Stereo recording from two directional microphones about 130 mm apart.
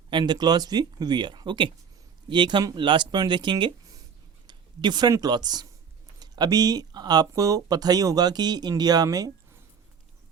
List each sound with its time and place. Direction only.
0.1 s speech: 35° right (ahead or behind)